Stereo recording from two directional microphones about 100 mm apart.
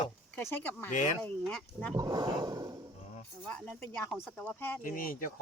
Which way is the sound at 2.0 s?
40° right (ahead or behind).